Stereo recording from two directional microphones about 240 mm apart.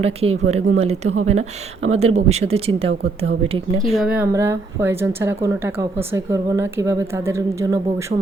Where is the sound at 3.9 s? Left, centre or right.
Centre.